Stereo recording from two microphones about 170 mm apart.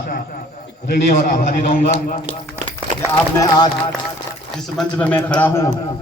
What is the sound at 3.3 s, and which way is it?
Speech, 20° left (ahead or behind).